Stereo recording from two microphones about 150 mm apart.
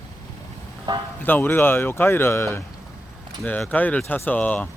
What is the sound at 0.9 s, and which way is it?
Speech, 30° right (ahead or behind).